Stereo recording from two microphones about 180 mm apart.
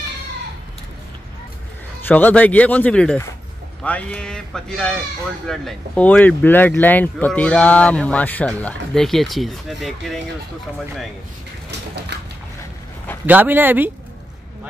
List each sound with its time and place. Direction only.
2.0 s speech: 10° left (ahead or behind)
12.1 s a sound: 70° right (ahead or behind)
13.3 s speech: 10° right (ahead or behind)